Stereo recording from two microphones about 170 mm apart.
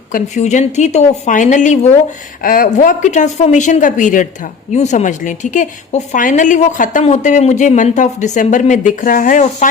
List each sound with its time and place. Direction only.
0.1 s speech: 45° left (ahead or behind)
2.4 s speech: 55° left (ahead or behind)